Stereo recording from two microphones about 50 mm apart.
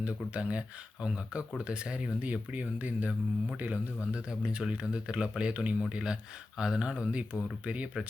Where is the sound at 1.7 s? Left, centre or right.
Right.